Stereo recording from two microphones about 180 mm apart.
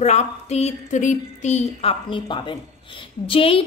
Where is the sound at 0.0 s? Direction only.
40° left (ahead or behind).